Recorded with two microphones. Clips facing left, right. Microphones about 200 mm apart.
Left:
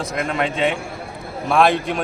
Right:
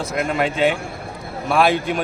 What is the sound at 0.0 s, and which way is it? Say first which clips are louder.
A man's voice: right 1 dB; 5° right (ahead or behind).